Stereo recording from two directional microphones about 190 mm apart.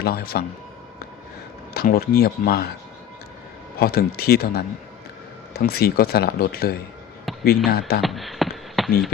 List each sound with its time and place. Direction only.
0.0 s speech: 55° left (ahead or behind)
1.7 s speech: 55° left (ahead or behind)
3.8 s speech: 55° left (ahead or behind)
7.3 s a sound: centre (ahead or behind)
7.7 s speech: 55° left (ahead or behind)
8.0 s a sound: centre (ahead or behind)